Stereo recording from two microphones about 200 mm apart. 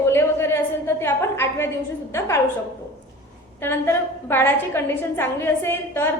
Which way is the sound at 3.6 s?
10° left (ahead or behind).